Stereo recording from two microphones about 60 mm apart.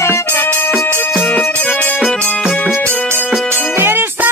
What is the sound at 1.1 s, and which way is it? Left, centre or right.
Music, left.